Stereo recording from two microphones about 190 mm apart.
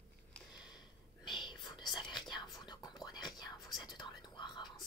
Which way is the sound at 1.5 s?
25° left (ahead or behind).